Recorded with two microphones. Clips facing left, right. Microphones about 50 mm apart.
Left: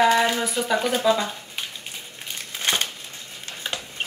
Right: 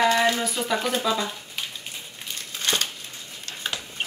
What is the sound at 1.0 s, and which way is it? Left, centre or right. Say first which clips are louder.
Speech: left 4 dB; left.